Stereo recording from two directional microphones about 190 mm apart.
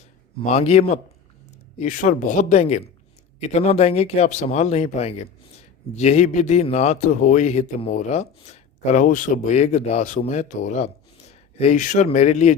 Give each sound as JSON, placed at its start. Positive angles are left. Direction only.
{"t": 0.4, "sound": "a man's voice", "side_deg": 35}
{"t": 11.3, "sound": "a sound", "side_deg": 35}
{"t": 12.0, "sound": "a man's voice", "side_deg": 35}